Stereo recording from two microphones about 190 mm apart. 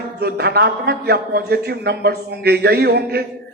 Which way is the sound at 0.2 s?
55° right (ahead or behind).